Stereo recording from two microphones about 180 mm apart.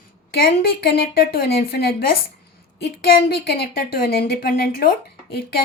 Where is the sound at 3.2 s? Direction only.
55° left (ahead or behind).